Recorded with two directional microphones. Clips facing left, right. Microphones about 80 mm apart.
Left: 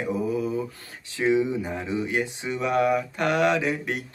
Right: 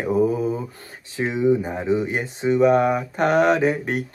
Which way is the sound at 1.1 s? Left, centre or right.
Right.